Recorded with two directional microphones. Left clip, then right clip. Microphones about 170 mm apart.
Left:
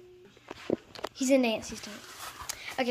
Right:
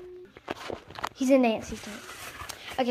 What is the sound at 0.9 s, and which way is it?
Speech, 5° right (ahead or behind).